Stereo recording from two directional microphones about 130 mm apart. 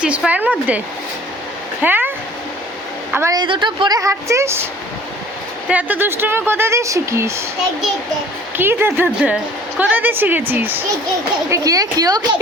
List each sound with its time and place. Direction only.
0.0 s speech: 10° right (ahead or behind)
1.8 s speech: 15° right (ahead or behind)
3.1 s a woman's voice: 20° right (ahead or behind)
3.3 s a woman's voice: 35° right (ahead or behind); by 4.6 s 20° right (ahead or behind)
5.6 s speech: 10° right (ahead or behind)
8.5 s speech: 15° right (ahead or behind)
11.5 s a woman's voice: 25° right (ahead or behind)